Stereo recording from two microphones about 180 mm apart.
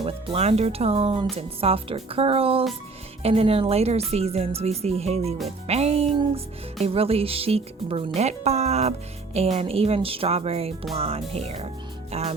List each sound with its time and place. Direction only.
0.0 s speech: 35° right (ahead or behind)